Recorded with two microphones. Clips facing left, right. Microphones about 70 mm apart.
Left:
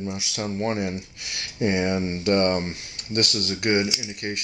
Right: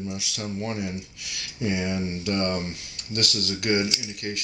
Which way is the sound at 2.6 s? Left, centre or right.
Left.